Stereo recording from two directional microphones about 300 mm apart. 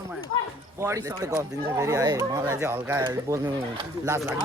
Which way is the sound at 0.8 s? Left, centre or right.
Centre.